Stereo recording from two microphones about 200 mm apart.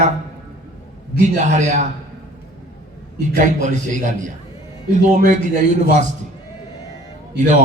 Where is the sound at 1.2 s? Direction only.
35° right (ahead or behind).